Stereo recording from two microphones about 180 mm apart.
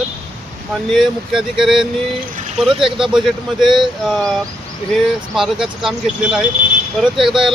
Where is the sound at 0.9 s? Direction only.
Centre (ahead or behind).